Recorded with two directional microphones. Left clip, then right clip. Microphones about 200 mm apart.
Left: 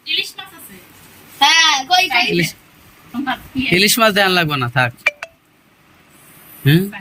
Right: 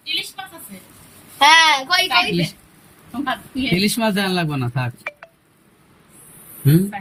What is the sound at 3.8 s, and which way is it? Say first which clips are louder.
Speech: left 10 dB; centre (ahead or behind).